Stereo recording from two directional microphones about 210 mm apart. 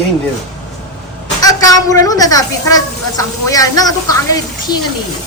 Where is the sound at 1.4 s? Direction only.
15° left (ahead or behind).